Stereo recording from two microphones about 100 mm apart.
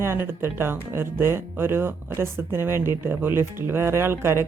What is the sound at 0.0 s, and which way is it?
Speech, 25° right (ahead or behind).